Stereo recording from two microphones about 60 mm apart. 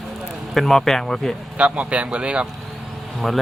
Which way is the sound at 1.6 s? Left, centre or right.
Centre.